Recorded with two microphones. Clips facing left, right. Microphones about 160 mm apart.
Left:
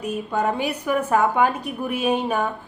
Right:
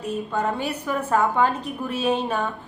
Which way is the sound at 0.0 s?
10° left (ahead or behind).